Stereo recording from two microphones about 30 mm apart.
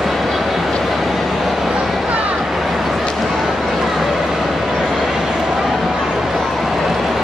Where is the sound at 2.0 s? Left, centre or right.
Right.